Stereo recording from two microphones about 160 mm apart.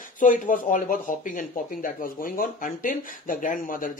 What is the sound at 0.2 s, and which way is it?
Speech, 55° left (ahead or behind).